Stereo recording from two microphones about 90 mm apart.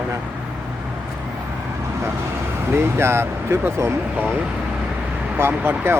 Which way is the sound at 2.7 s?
25° right (ahead or behind).